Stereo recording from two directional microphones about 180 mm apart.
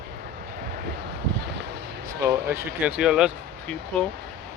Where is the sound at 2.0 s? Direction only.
15° right (ahead or behind); by 4.1 s 5° left (ahead or behind).